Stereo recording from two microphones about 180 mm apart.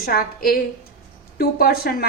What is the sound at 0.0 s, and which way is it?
A woman's voice, 55° left (ahead or behind).